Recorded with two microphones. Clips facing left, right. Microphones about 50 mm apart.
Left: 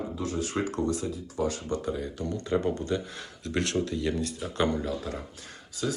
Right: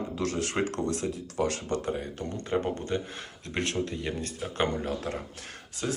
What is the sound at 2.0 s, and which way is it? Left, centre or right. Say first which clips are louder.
Speech: left 2 dB; right.